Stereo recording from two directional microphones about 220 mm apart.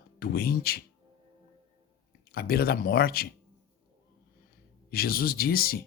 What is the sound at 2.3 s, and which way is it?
Speech, 45° left (ahead or behind).